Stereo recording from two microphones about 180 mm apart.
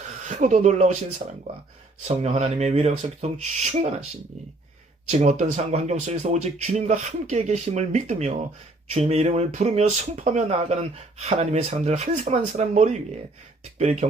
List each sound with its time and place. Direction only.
0.0 s speech: 40° right (ahead or behind)
5.0 s speech: 40° right (ahead or behind)